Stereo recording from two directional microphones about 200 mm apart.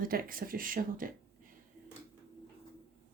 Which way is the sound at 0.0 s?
45° right (ahead or behind).